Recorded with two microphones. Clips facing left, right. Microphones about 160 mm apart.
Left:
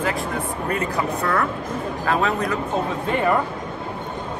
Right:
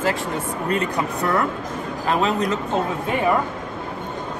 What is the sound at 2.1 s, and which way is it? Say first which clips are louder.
Speech: right 1 dB; 20° right (ahead or behind).